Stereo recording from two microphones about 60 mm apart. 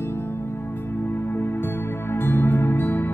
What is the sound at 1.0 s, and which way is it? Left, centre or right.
Music, left.